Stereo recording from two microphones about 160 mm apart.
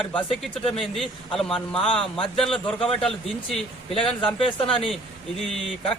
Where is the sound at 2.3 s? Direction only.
5° left (ahead or behind).